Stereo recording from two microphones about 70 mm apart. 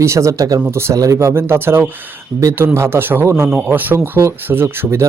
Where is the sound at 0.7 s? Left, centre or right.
Right.